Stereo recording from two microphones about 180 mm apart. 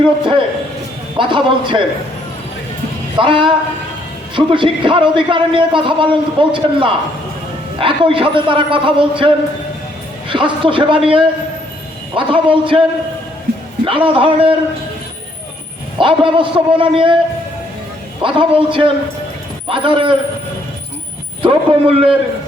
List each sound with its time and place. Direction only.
0.0 s a man's voice: 30° right (ahead or behind)
3.2 s a man's voice: 30° right (ahead or behind)
13.8 s a man's voice: 30° right (ahead or behind)
16.0 s a man's voice: 30° right (ahead or behind)
18.2 s a man's voice: 30° right (ahead or behind)
21.4 s a man's voice: 30° right (ahead or behind)